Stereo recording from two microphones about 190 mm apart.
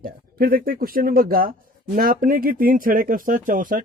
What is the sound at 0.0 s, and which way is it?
Speech, 50° right (ahead or behind).